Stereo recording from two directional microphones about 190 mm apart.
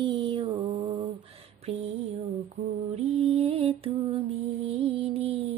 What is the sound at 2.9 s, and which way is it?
Music, 30° right (ahead or behind).